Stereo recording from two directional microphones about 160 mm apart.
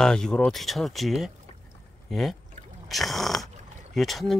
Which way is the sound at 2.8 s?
Centre (ahead or behind).